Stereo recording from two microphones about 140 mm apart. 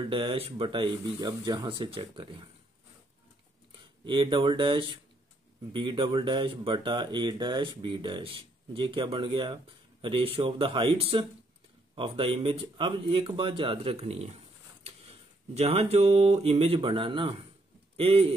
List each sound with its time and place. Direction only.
0.0 s speech: 40° right (ahead or behind)
4.0 s a man's voice: 35° right (ahead or behind)